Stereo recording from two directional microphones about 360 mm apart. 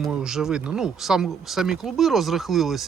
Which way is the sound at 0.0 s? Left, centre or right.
Centre.